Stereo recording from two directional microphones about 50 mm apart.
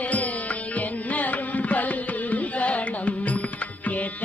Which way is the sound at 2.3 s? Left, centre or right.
Left.